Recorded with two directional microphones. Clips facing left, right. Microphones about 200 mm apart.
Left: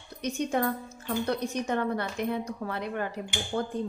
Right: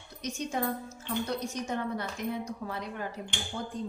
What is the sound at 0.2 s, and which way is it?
A woman's voice, 60° left (ahead or behind).